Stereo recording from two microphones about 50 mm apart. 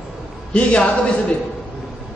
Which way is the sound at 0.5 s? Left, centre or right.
Left.